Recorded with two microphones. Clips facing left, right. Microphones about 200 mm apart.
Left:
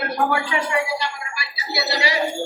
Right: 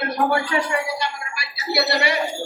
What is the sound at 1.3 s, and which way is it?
Speech, 60° right (ahead or behind).